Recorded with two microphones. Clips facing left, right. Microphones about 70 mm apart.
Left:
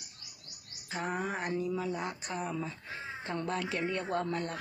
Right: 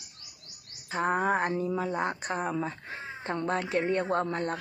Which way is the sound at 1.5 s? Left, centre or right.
Right.